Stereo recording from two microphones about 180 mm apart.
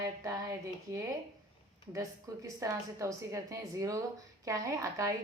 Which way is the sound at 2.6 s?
15° right (ahead or behind).